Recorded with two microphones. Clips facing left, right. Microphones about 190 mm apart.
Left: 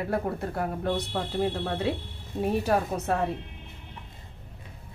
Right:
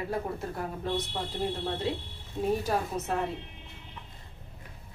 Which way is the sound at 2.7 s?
65° left (ahead or behind).